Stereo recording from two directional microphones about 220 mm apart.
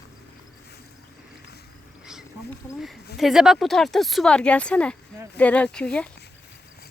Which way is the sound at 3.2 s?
Centre (ahead or behind).